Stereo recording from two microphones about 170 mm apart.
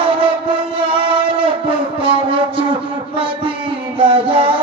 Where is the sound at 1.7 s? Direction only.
30° right (ahead or behind).